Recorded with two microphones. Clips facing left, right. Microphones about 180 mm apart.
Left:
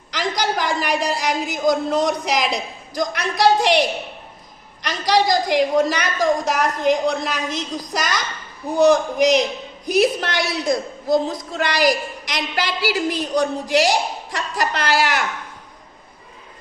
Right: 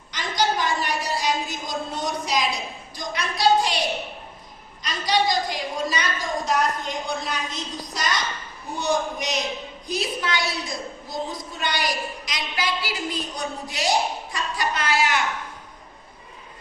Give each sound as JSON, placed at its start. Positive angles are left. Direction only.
{"t": 0.1, "sound": "a woman's voice", "side_deg": 90}
{"t": 2.9, "sound": "a woman's voice", "side_deg": 85}